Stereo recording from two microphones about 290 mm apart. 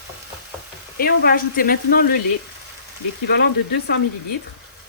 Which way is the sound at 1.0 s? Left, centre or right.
Left.